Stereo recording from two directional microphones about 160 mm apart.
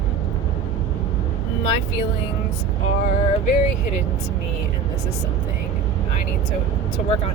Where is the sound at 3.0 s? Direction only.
45° left (ahead or behind).